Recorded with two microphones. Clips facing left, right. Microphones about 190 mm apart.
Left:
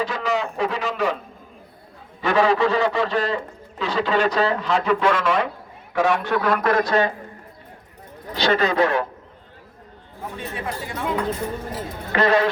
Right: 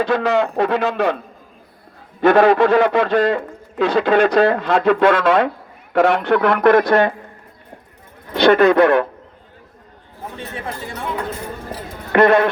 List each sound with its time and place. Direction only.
0.0 s a man's voice: 60° right (ahead or behind)
2.2 s a man's voice: 55° right (ahead or behind)
8.3 s a man's voice: 60° right (ahead or behind)
12.1 s a man's voice: 55° right (ahead or behind)